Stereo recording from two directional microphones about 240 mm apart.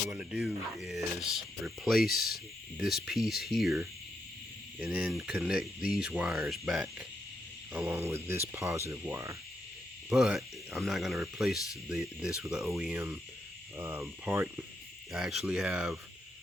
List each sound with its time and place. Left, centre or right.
0.1 s speech: centre
2.0 s speech: left
2.7 s speech: centre